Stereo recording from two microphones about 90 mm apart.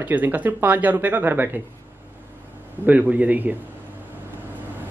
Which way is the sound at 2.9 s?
15° right (ahead or behind).